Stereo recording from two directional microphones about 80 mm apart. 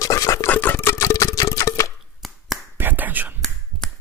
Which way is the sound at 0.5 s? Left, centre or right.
Left.